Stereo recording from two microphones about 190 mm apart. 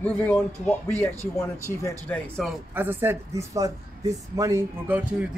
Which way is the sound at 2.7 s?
10° right (ahead or behind).